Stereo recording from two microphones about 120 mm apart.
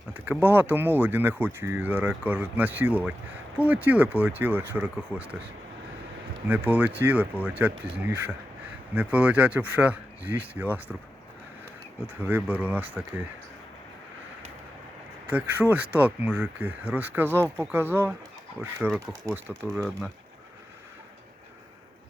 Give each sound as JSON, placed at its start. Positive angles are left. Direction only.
{"t": 0.1, "sound": "speech", "side_deg": -15}
{"t": 6.5, "sound": "speech", "side_deg": -10}
{"t": 12.2, "sound": "speech", "side_deg": -15}
{"t": 15.3, "sound": "speech", "side_deg": -15}
{"t": 19.7, "sound": "speech", "side_deg": 0}